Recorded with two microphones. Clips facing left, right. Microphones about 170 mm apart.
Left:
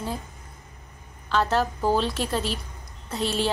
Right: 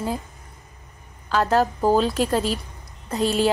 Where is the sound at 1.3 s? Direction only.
5° right (ahead or behind).